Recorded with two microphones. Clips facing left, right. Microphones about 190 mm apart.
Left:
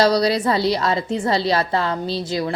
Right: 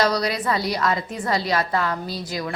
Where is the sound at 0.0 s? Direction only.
30° left (ahead or behind).